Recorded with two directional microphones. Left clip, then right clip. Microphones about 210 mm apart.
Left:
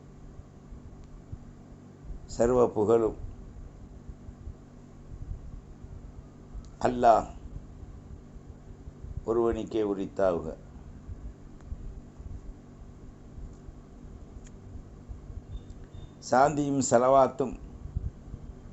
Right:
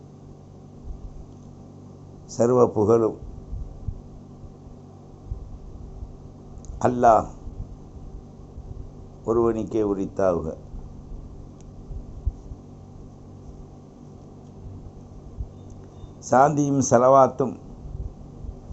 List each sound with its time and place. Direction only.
2.4 s speech: centre (ahead or behind)
6.8 s speech: 5° left (ahead or behind)
9.2 s speech: centre (ahead or behind)
16.3 s speech: 5° left (ahead or behind)